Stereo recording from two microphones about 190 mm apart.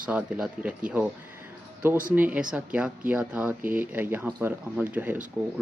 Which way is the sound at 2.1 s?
10° right (ahead or behind).